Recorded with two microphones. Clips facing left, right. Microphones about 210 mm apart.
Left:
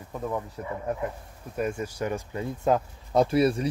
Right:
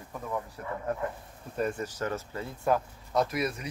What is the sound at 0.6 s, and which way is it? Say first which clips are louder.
Speech: left 2 dB; 15° left (ahead or behind).